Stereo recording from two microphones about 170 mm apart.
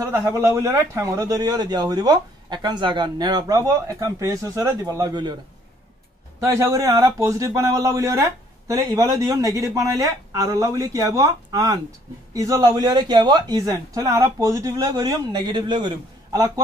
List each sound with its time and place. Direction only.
0.0 s a man's voice: 20° right (ahead or behind)
6.4 s a man's voice: 15° right (ahead or behind)